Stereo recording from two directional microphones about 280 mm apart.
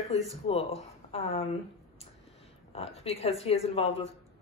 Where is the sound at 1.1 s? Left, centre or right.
Left.